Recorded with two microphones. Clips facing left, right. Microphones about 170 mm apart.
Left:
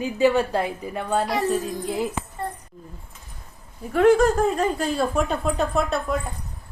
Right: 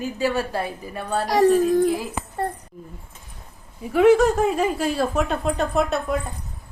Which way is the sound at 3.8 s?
5° right (ahead or behind).